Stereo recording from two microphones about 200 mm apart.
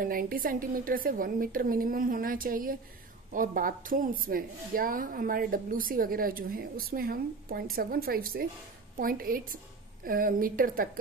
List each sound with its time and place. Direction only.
0.0 s a woman's voice: 45° right (ahead or behind)